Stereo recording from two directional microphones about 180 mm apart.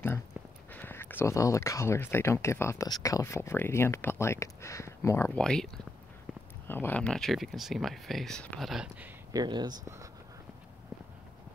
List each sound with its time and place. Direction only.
0.7 s speech: 10° left (ahead or behind)
6.7 s speech: 10° left (ahead or behind)
9.3 s speech: 25° right (ahead or behind)